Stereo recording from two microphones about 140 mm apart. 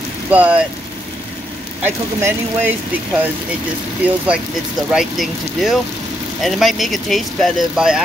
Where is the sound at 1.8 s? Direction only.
15° right (ahead or behind).